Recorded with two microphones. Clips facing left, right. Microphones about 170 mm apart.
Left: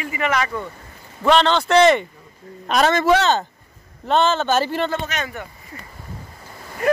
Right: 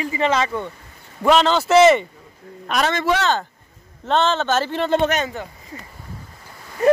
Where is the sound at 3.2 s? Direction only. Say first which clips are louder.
Left 2 dB; 20° left (ahead or behind).